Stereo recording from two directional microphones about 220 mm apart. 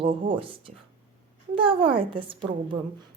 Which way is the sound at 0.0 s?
25° right (ahead or behind).